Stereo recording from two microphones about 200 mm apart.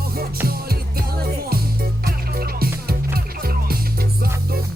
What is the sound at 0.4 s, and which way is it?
Music, 50° right (ahead or behind).